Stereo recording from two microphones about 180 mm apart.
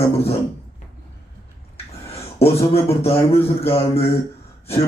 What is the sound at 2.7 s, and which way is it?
A man's voice, 35° left (ahead or behind).